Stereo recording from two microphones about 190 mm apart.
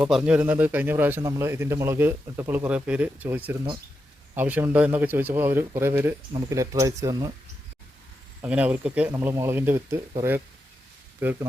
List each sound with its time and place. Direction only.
0.0 s speech: 5° right (ahead or behind)
8.4 s speech: 5° right (ahead or behind)